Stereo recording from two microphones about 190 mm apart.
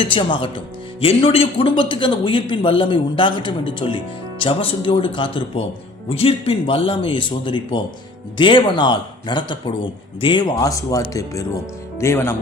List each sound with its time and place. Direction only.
0.0 s a man's voice: 25° left (ahead or behind)